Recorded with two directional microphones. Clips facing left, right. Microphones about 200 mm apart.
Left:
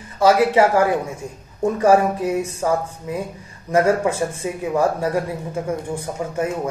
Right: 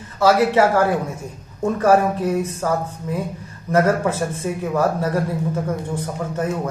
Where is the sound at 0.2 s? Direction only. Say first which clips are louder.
Left 1 dB; 15° left (ahead or behind).